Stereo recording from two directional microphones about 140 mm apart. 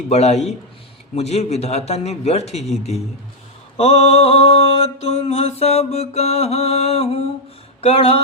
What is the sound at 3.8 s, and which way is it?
Mantra, 50° left (ahead or behind).